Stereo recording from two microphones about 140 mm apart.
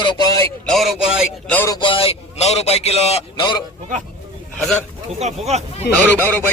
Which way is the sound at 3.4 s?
35° left (ahead or behind).